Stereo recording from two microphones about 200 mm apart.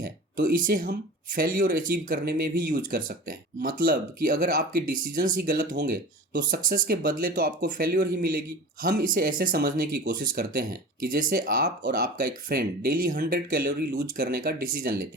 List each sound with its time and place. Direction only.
0.0 s speech: 45° right (ahead or behind)